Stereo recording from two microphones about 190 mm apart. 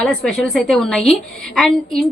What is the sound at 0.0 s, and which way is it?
A woman's voice, 5° left (ahead or behind).